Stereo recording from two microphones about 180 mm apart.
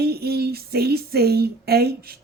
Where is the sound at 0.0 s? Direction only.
60° right (ahead or behind).